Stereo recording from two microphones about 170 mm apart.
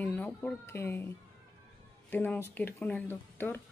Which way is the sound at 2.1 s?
10° left (ahead or behind).